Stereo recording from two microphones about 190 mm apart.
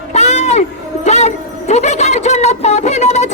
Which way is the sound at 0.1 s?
35° left (ahead or behind).